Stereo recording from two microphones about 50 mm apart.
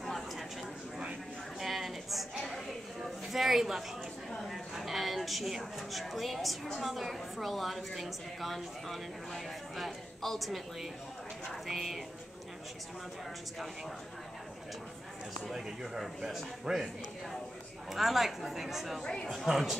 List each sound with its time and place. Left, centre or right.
0.0 s a sound: centre
1.6 s a sound: centre
4.5 s a woman's voice: centre
15.5 s speech: centre
17.9 s a woman's voice: centre
19.0 s speech: centre
19.4 s a woman's voice: centre